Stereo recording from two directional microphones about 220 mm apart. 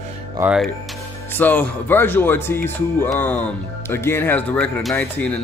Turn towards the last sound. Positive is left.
turn(degrees=5)  # may be behind; listen again after turning